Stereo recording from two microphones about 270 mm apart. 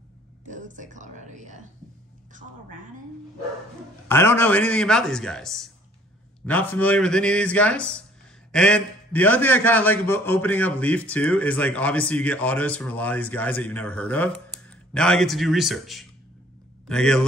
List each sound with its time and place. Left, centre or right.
0.5 s speech: right
4.1 s a man's voice: centre